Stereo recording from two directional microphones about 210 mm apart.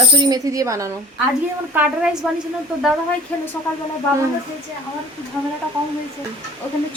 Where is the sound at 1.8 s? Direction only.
5° right (ahead or behind).